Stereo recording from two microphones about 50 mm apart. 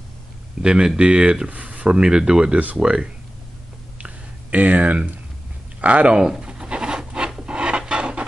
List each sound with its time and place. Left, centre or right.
0.6 s speech: centre
4.0 s a sound: right
5.8 s speech: right
6.2 s rub: centre